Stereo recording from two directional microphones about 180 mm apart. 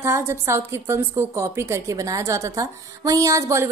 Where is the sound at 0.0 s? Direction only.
15° right (ahead or behind).